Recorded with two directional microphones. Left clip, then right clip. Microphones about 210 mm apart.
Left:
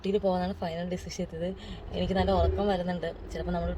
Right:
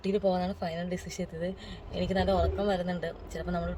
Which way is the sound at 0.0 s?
25° right (ahead or behind).